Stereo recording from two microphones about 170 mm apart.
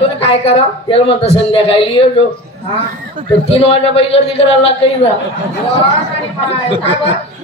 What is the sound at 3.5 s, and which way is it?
Speech, 35° left (ahead or behind).